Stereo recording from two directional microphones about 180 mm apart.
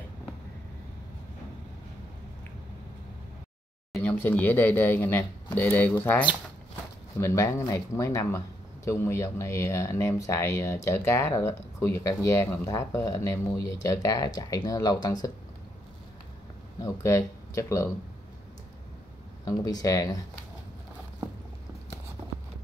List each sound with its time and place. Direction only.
3.9 s speech: 10° left (ahead or behind)
16.8 s speech: 15° left (ahead or behind)
19.4 s speech: 20° left (ahead or behind)